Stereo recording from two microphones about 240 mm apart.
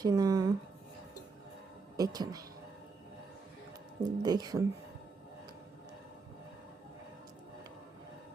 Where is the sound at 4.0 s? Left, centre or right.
Centre.